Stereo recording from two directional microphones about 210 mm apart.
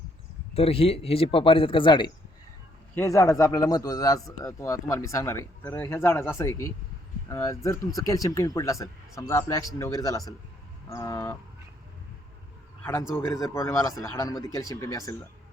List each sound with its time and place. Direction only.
0.5 s speech: 30° left (ahead or behind); by 11.3 s 10° left (ahead or behind)
12.8 s speech: 15° left (ahead or behind)